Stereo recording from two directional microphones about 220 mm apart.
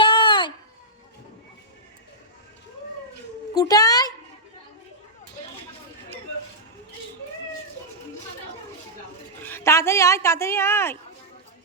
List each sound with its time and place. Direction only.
0.0 s baby cry: 20° left (ahead or behind)
3.5 s a sound: 15° left (ahead or behind)
9.4 s speech: 10° left (ahead or behind)